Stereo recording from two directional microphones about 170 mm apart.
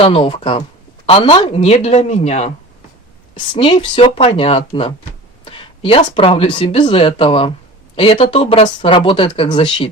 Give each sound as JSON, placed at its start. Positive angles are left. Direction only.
{"t": 0.0, "sound": "speech", "side_deg": 30}